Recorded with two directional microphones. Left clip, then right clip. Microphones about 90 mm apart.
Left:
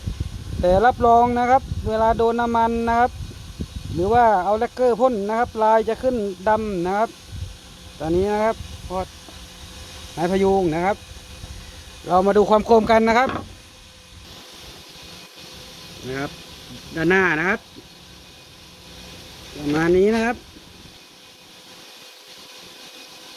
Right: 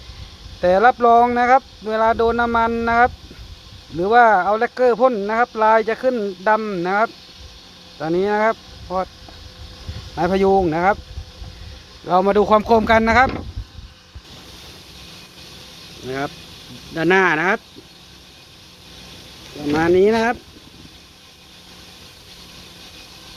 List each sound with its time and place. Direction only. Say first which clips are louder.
0.6 s speech: right 3 dB; 5° right (ahead or behind)
4.1 s speech: right 3 dB; centre (ahead or behind)
6.6 s speech: right 1 dB; 10° left (ahead or behind)
6.8 s speech: right 4 dB; centre (ahead or behind)
7.9 s speech: right 2 dB; 10° right (ahead or behind)
10.2 s speech: right 3 dB; 10° right (ahead or behind)
12.0 s speech: right 1 dB; 5° left (ahead or behind)
16.0 s speech: right 3 dB; 50° left (ahead or behind)
19.9 s speech: right 3 dB; 35° left (ahead or behind)